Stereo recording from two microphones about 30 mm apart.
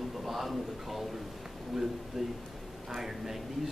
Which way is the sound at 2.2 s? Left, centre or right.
Centre.